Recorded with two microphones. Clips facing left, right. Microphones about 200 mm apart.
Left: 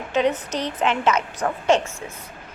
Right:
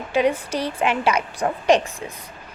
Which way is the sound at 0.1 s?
10° right (ahead or behind).